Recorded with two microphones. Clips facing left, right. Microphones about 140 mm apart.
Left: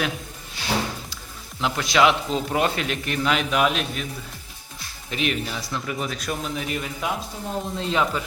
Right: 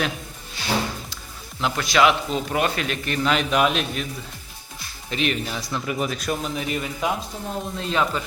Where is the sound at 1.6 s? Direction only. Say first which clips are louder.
Even; 20° left (ahead or behind).